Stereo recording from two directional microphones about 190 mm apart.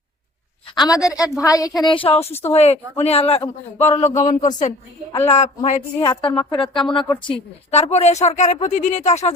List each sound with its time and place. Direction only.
0.8 s a woman's voice: 20° left (ahead or behind); by 5.8 s 35° left (ahead or behind)
6.0 s speech: 25° left (ahead or behind)